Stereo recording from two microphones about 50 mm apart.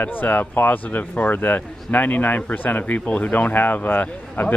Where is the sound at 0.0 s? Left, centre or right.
Left.